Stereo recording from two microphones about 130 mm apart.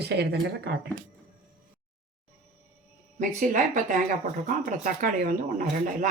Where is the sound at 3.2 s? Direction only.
75° right (ahead or behind).